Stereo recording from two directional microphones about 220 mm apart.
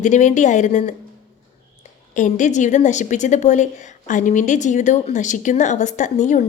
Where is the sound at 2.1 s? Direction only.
35° left (ahead or behind).